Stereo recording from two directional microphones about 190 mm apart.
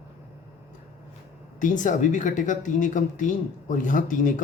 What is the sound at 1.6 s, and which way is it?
A man's voice, 40° left (ahead or behind).